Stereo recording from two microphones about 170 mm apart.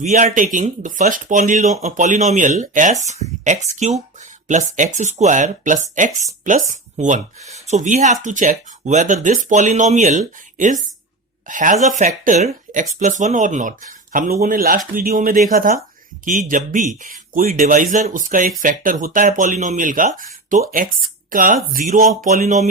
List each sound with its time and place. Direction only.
0.0 s speech: 45° right (ahead or behind)